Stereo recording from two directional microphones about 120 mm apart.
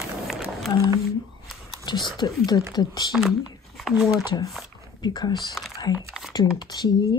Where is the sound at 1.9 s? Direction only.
40° left (ahead or behind).